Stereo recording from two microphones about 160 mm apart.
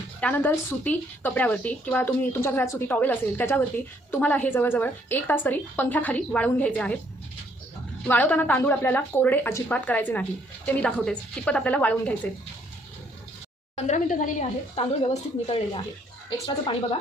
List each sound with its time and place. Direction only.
0.2 s a woman's voice: 10° left (ahead or behind)
8.0 s a woman's voice: 10° left (ahead or behind)
13.7 s a woman's voice: 45° left (ahead or behind)